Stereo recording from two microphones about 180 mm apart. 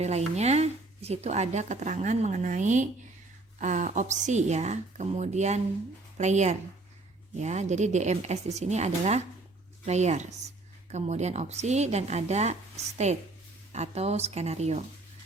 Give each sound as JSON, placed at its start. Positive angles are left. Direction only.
{"t": 0.0, "sound": "speech", "side_deg": -35}